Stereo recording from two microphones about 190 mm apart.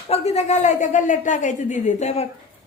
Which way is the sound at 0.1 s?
35° left (ahead or behind).